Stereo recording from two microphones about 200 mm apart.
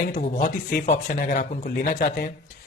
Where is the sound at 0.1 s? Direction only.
45° left (ahead or behind).